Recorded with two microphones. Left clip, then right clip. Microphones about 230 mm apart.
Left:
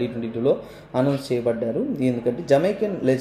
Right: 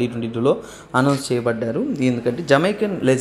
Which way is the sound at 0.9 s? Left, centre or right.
Centre.